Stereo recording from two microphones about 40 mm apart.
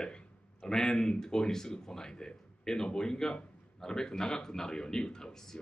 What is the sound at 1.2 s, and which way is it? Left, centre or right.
Speech, centre.